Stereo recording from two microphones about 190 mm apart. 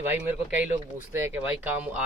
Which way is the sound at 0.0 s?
10° right (ahead or behind).